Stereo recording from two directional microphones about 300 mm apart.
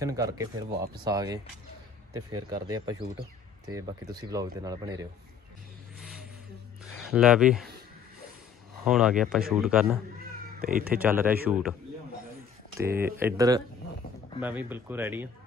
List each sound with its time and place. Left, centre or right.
0.0 s speech: centre
5.9 s vehicle: centre
6.9 s speech: centre
8.8 s speech: centre
10.6 s speech: right
11.0 s speech: centre
12.8 s speech: centre